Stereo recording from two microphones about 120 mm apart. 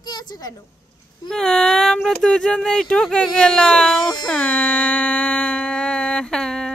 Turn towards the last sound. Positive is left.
turn(degrees=5)  # may be behind; listen again after turning